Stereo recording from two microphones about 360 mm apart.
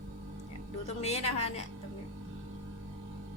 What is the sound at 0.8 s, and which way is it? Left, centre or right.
Speech, centre.